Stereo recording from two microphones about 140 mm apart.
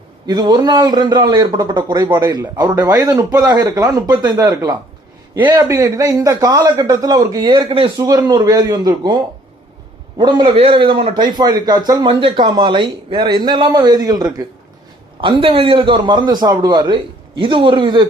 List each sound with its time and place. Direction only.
0.3 s a man's voice: 30° right (ahead or behind)
10.2 s a man's voice: 35° right (ahead or behind)
15.2 s a man's voice: 40° right (ahead or behind)